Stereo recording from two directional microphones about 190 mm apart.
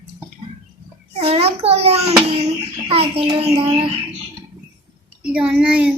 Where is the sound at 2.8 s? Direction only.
30° right (ahead or behind).